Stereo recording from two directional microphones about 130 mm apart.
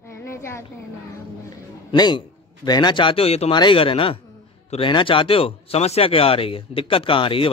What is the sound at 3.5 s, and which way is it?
Speech, 40° left (ahead or behind).